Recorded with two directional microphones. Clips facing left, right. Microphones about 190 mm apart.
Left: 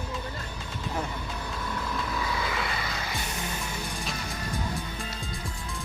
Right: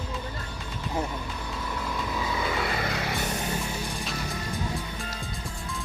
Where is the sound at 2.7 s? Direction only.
60° right (ahead or behind).